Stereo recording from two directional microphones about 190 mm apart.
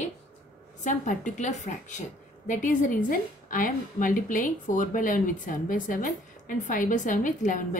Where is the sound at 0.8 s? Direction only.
40° left (ahead or behind).